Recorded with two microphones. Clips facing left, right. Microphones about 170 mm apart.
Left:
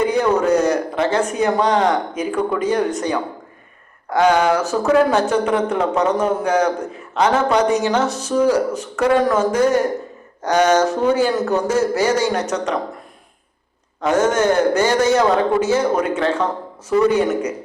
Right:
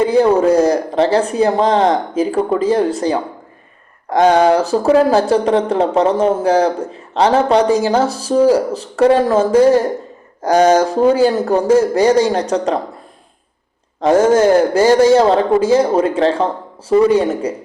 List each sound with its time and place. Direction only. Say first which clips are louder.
0.0 s speech: right 5 dB; 30° right (ahead or behind)
14.0 s speech: right 6 dB; 30° right (ahead or behind)